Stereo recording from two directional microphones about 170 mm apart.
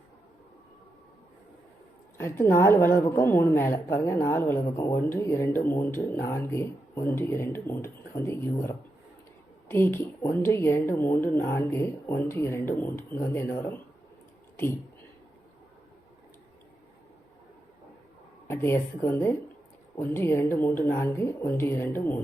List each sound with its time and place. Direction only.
2.1 s a woman's voice: 15° left (ahead or behind)
18.4 s a woman's voice: 15° left (ahead or behind)